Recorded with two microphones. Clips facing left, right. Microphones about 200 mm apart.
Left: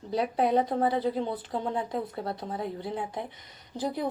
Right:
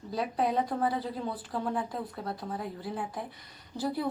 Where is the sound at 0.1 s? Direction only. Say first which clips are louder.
Left 4 dB; 25° left (ahead or behind).